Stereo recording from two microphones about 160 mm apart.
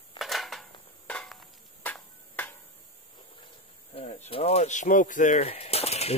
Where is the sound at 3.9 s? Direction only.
40° left (ahead or behind).